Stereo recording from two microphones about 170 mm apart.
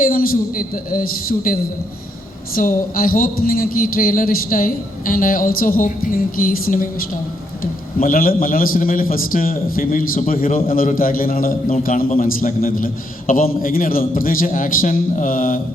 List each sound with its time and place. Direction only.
0.0 s a man's voice: 55° left (ahead or behind)
2.6 s a man's voice: 55° left (ahead or behind)